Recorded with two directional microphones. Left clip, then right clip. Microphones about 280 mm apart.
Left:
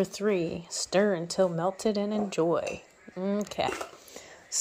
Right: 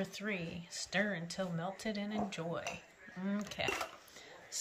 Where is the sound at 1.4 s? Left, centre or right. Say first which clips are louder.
Left 18 dB; left.